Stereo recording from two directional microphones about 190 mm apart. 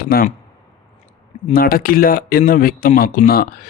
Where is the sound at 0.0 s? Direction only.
50° left (ahead or behind).